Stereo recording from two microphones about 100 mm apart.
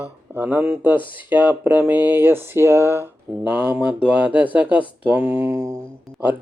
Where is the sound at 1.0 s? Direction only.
55° left (ahead or behind).